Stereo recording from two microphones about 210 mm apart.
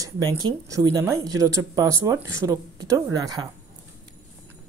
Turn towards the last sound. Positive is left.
turn(degrees=-20)  # may be behind; listen again after turning